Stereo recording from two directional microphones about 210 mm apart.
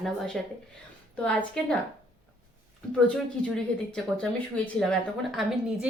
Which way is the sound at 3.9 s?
5° left (ahead or behind).